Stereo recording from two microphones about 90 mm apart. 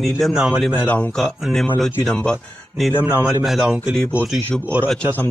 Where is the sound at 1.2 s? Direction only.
Centre (ahead or behind).